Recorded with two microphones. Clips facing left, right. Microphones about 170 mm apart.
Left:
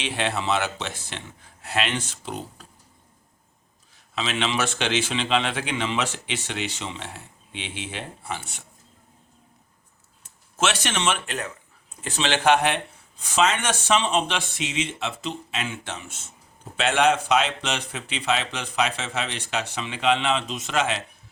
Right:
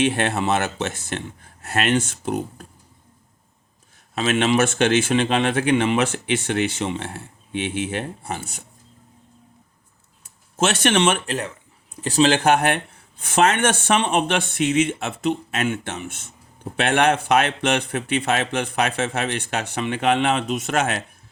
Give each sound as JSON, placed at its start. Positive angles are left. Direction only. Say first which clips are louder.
{"t": 0.0, "sound": "speech", "louder": "right 6 dB", "side_deg": -50}
{"t": 4.1, "sound": "speech", "louder": "right 7 dB", "side_deg": -50}
{"t": 10.6, "sound": "speech", "louder": "right 6 dB", "side_deg": -50}
{"t": 11.3, "sound": "speech", "louder": "right 5 dB", "side_deg": -30}